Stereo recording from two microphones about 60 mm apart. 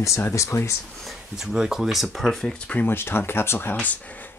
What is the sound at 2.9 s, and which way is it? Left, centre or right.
Speech, left.